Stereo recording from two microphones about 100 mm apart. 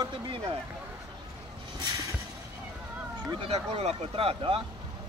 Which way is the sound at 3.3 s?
70° right (ahead or behind).